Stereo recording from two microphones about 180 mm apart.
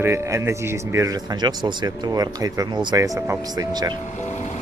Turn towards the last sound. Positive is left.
turn(degrees=40)  # may be behind; listen again after turning